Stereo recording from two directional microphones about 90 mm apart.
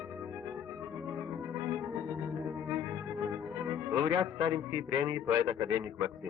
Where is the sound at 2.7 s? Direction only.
35° right (ahead or behind).